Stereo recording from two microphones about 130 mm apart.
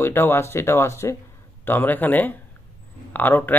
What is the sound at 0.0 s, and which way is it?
Speech, 20° left (ahead or behind).